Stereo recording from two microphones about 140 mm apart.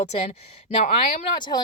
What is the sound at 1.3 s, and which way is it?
Speech, 30° left (ahead or behind).